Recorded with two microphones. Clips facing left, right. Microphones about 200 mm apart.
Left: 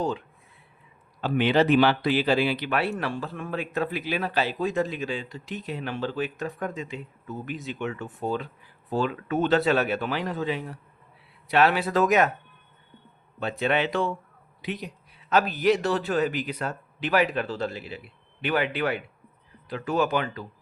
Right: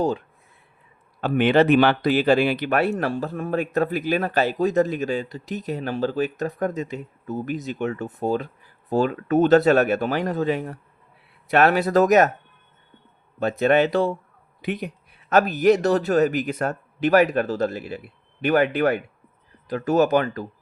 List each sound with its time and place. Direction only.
1.2 s speech: 50° right (ahead or behind)
13.4 s speech: 45° right (ahead or behind)
14.6 s speech: 55° right (ahead or behind)